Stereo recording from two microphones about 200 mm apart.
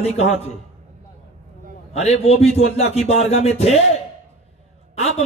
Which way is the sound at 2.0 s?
30° left (ahead or behind).